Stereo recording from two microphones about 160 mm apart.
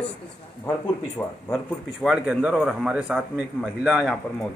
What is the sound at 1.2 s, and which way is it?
Speech, 20° left (ahead or behind).